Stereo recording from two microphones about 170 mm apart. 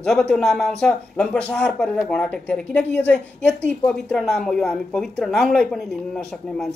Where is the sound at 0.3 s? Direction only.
Centre (ahead or behind).